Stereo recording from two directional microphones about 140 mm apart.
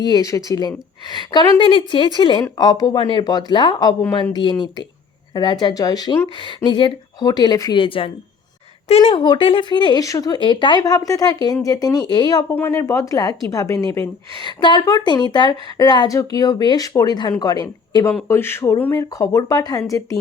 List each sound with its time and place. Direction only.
0.0 s speech: 25° left (ahead or behind)
7.8 s speech: 40° left (ahead or behind); by 14.1 s 20° left (ahead or behind)
14.4 s speech: 30° left (ahead or behind)
18.1 s speech: 15° left (ahead or behind)